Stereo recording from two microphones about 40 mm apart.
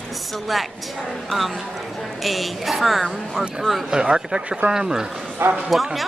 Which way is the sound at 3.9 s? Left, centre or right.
Centre.